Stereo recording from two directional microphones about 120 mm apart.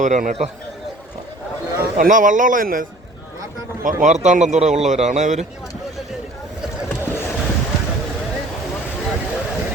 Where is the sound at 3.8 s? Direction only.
90° right.